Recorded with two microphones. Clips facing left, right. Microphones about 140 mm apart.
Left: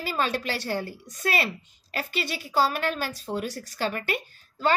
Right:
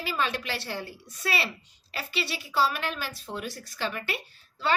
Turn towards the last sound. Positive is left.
turn(degrees=45)  # may be behind; listen again after turning